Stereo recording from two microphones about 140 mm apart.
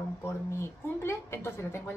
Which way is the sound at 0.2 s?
15° left (ahead or behind).